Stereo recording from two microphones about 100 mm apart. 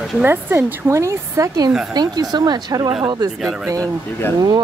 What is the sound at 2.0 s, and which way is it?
Speech, 45° right (ahead or behind).